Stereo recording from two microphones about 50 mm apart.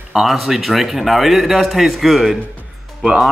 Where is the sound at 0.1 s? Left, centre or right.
Centre.